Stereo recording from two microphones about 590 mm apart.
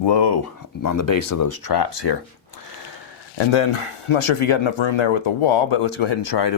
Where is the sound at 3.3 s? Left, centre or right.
Left.